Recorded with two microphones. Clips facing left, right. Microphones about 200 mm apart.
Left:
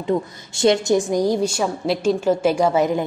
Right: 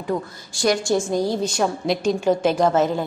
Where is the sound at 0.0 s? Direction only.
25° left (ahead or behind).